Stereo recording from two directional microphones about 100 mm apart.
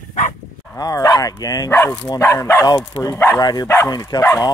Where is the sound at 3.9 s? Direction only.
45° left (ahead or behind).